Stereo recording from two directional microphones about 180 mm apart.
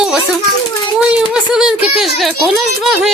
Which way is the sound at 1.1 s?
5° right (ahead or behind).